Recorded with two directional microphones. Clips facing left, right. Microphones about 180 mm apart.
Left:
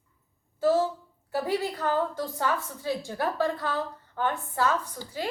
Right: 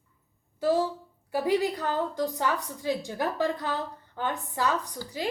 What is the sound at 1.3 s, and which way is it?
A woman's voice, 15° right (ahead or behind).